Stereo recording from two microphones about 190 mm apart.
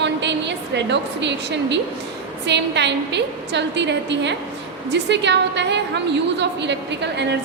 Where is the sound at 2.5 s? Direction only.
65° right (ahead or behind).